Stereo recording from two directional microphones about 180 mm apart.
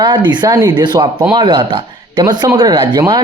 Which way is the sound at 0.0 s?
25° right (ahead or behind).